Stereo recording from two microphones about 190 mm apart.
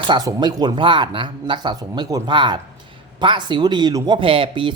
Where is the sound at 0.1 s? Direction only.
20° right (ahead or behind).